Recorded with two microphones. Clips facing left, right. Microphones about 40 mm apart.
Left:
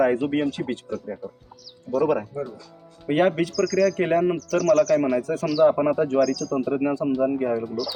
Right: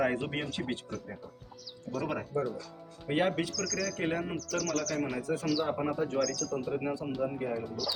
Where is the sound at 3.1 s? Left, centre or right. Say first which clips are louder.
Left 9 dB; left.